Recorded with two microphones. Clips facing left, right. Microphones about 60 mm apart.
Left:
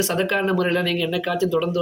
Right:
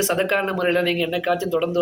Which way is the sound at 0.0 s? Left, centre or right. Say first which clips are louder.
Right 1 dB; right.